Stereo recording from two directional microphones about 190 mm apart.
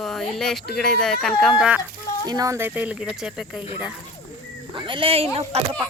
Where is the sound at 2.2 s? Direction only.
20° right (ahead or behind); by 3.6 s centre (ahead or behind).